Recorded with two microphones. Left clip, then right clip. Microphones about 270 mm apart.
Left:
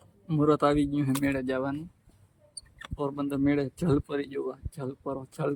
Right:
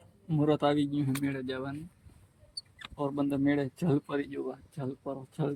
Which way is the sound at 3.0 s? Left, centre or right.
Centre.